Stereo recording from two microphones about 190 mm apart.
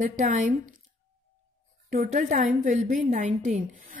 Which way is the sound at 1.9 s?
45° right (ahead or behind).